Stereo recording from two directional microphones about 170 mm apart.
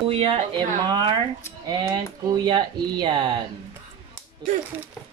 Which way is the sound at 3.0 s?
30° right (ahead or behind).